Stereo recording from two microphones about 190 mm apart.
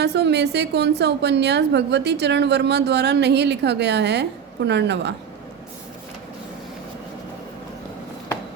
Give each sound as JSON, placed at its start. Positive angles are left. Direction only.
{"t": 0.0, "sound": "a woman's voice", "side_deg": -60}